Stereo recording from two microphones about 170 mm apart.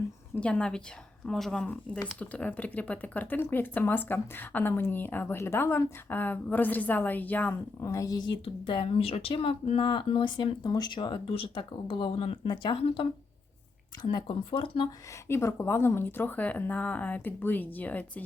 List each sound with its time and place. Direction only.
0.3 s speech: 5° left (ahead or behind); by 14.8 s 30° left (ahead or behind)
15.3 s speech: 15° left (ahead or behind)